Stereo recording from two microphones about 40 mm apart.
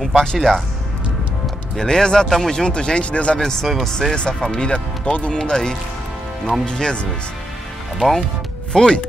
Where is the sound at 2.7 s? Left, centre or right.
Left.